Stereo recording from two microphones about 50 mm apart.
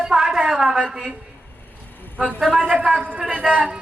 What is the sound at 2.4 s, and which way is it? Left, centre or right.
Speech, centre.